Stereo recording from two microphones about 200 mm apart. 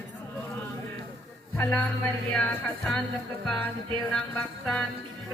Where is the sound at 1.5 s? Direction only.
5° left (ahead or behind).